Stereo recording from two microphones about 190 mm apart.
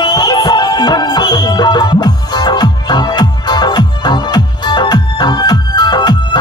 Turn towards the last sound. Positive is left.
turn(degrees=20)  # may be behind; listen again after turning